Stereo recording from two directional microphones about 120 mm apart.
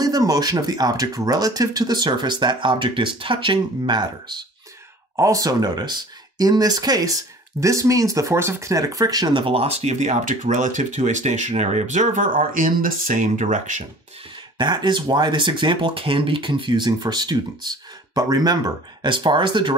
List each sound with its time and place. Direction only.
0.0 s speech: 30° right (ahead or behind); by 13.8 s 90° right
14.6 s speech: 35° right (ahead or behind)